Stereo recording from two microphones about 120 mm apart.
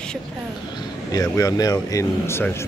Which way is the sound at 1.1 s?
30° left (ahead or behind).